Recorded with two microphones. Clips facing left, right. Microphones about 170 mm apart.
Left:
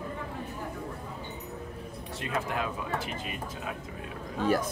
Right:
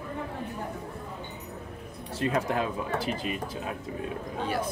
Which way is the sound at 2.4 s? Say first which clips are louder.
Right 4 dB; 30° right (ahead or behind).